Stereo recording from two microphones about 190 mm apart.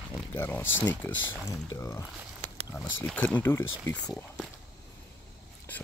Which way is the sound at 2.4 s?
30° right (ahead or behind).